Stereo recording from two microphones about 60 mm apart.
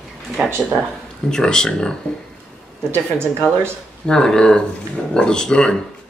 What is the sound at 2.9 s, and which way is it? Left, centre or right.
Speech, right.